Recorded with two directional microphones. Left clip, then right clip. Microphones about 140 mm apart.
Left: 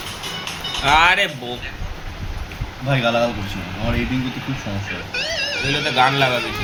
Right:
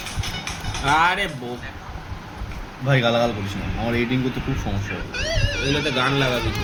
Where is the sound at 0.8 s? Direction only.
10° left (ahead or behind).